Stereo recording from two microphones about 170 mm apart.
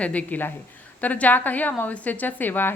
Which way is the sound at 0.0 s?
10° left (ahead or behind).